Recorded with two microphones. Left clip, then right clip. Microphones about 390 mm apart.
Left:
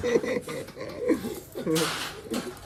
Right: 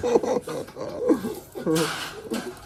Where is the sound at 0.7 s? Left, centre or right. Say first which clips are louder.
Right 4 dB; right.